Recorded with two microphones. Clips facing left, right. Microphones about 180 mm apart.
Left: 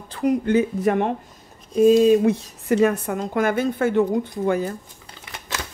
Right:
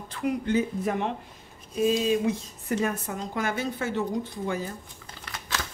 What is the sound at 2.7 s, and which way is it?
A woman's voice, 75° left (ahead or behind).